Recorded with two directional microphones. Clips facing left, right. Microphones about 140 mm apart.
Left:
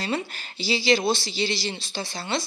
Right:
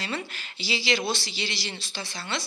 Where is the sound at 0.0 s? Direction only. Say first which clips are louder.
Left 5 dB; 35° left (ahead or behind).